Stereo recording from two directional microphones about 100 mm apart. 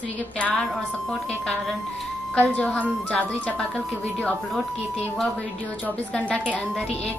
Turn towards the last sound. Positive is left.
turn(degrees=10)  # may be behind; listen again after turning